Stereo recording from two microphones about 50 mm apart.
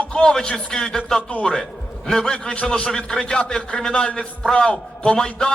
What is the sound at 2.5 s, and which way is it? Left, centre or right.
Speech, left.